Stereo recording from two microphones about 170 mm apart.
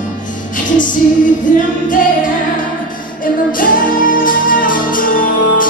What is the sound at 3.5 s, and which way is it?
Music, 55° left (ahead or behind).